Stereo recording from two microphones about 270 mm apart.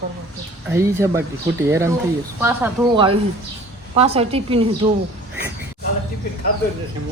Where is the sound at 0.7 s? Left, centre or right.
Centre.